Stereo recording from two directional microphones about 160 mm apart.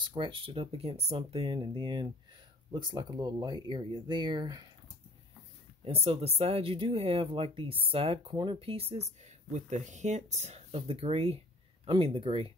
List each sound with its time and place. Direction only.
0.0 s speech: 30° right (ahead or behind)
5.9 s speech: 40° right (ahead or behind)